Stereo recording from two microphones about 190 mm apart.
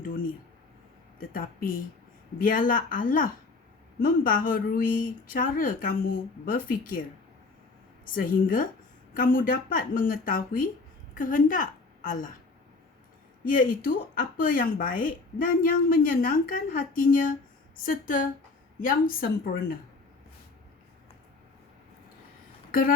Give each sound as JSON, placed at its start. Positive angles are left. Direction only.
{"t": 1.2, "sound": "speech", "side_deg": 45}
{"t": 8.0, "sound": "a woman's voice", "side_deg": 45}
{"t": 13.4, "sound": "speech", "side_deg": 45}
{"t": 22.7, "sound": "speech", "side_deg": 50}